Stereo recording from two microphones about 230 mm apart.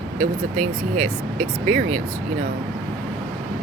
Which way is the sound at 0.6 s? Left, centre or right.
Right.